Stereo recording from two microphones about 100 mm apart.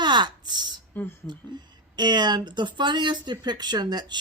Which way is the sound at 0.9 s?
20° left (ahead or behind).